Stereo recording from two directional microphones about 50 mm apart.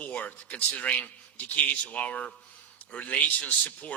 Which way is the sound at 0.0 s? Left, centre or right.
Left.